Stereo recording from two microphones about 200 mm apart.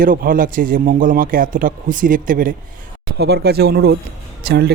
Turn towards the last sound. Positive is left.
turn(degrees=-55)  # may be behind; listen again after turning